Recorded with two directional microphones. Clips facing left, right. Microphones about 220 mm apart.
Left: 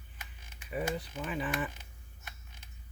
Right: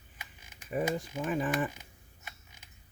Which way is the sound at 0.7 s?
45° right (ahead or behind).